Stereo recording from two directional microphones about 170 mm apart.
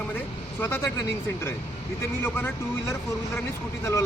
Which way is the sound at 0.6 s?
15° left (ahead or behind).